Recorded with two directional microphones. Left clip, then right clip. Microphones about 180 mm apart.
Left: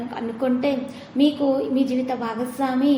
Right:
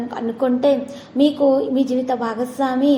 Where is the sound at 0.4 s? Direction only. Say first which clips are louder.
Right 6 dB; 20° right (ahead or behind).